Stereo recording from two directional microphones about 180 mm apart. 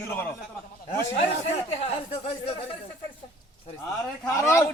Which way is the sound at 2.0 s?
35° left (ahead or behind).